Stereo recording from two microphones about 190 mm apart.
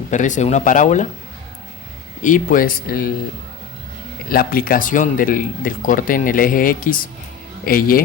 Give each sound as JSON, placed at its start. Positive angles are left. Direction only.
{"t": 0.1, "sound": "speech", "side_deg": 40}
{"t": 2.2, "sound": "speech", "side_deg": 45}
{"t": 4.3, "sound": "speech", "side_deg": 50}